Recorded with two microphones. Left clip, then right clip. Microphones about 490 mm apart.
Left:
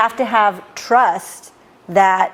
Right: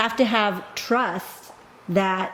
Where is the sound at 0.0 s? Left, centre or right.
Left.